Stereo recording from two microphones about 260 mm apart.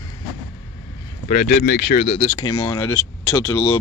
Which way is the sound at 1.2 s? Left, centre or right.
Left.